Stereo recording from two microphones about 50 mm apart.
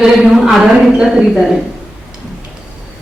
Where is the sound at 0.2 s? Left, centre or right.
Centre.